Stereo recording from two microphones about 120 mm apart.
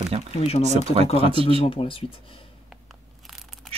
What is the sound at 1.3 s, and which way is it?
Speech, 50° right (ahead or behind).